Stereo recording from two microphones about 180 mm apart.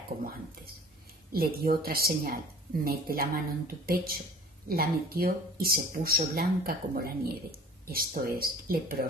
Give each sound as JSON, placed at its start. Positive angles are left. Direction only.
{"t": 1.3, "sound": "speech", "side_deg": -55}